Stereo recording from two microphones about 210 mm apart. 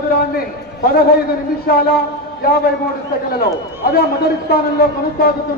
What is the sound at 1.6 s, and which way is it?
Speech, 50° left (ahead or behind).